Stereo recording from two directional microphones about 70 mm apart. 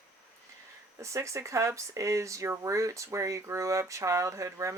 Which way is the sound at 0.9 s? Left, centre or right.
Right.